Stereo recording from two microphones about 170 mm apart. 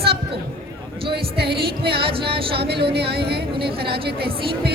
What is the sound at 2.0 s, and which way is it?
Speech, 30° right (ahead or behind).